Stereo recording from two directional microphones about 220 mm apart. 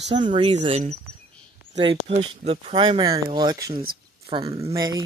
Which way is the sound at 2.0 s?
30° right (ahead or behind).